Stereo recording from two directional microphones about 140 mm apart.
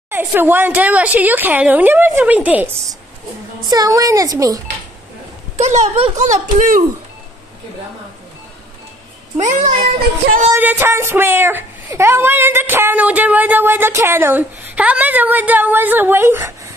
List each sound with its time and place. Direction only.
0.1 s speech: 15° right (ahead or behind)
3.6 s a woman's voice: 30° right (ahead or behind)
5.6 s speech: 55° right (ahead or behind)
6.2 s speech: 65° right (ahead or behind)
9.4 s speech: 60° right (ahead or behind)
10.6 s speech: 15° right (ahead or behind)